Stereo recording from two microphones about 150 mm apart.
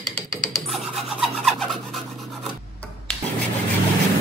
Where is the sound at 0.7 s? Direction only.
Centre (ahead or behind).